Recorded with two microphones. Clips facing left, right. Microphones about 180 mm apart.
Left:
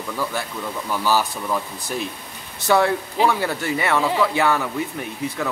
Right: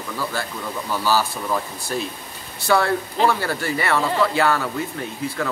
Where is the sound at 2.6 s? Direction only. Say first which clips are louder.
Left 1 dB; 20° left (ahead or behind).